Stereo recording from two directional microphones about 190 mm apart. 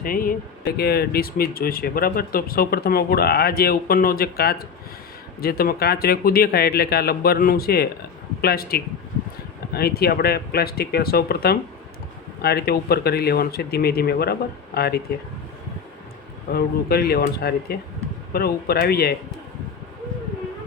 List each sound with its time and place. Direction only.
0.0 s speech: 50° left (ahead or behind)
16.5 s speech: 55° left (ahead or behind)